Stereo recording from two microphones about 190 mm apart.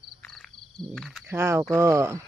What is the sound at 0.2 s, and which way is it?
Frog, 5° left (ahead or behind).